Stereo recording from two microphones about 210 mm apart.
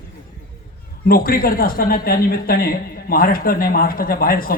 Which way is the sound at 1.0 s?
45° left (ahead or behind).